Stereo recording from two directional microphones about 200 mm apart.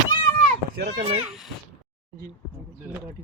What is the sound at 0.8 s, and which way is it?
Speech, 55° right (ahead or behind).